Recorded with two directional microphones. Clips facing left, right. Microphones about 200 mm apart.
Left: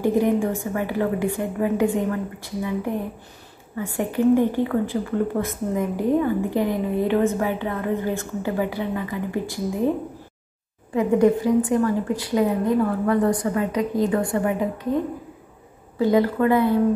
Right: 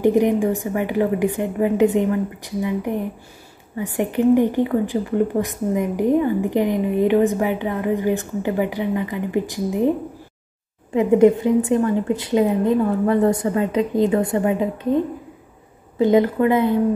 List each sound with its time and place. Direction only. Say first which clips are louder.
0.0 s a woman's voice: right 3 dB; 15° right (ahead or behind)
11.0 s a woman's voice: right 4 dB; 20° right (ahead or behind)
16.0 s a woman's voice: right 3 dB; 20° right (ahead or behind)